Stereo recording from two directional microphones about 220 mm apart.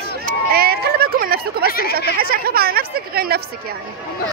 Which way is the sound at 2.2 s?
40° right (ahead or behind).